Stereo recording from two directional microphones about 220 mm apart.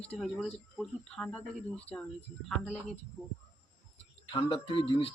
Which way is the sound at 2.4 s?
Centre (ahead or behind).